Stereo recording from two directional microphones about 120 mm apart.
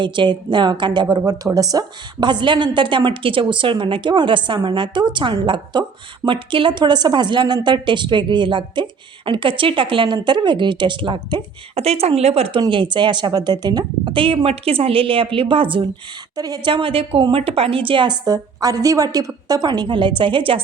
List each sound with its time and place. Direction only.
0.0 s a woman's voice: 40° right (ahead or behind)
11.8 s speech: 60° right (ahead or behind)
12.5 s a woman's voice: 40° right (ahead or behind)
16.3 s a woman's voice: 35° right (ahead or behind)